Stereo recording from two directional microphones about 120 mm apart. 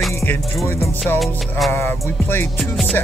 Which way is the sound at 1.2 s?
Centre (ahead or behind).